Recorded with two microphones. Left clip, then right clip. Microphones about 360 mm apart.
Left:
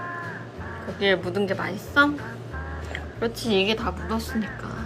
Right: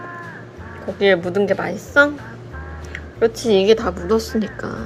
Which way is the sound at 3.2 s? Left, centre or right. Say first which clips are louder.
Right 8 dB; centre.